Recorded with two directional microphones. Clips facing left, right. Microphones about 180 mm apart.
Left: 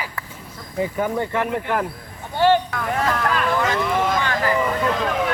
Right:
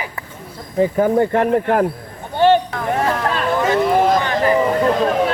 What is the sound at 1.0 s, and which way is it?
Speech, 40° right (ahead or behind).